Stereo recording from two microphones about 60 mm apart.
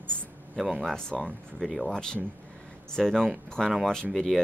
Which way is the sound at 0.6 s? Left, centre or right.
Centre.